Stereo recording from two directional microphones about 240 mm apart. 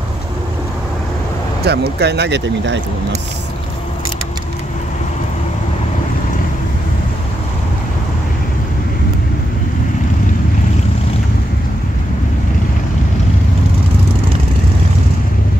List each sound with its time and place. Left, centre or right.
1.6 s speech: right